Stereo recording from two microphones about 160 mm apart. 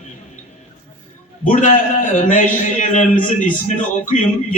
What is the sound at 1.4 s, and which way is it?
A man's voice, 55° left (ahead or behind).